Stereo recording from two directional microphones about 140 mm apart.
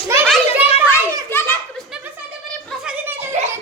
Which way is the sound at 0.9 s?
15° left (ahead or behind).